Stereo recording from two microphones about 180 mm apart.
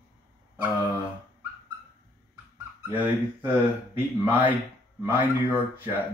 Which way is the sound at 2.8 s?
10° right (ahead or behind).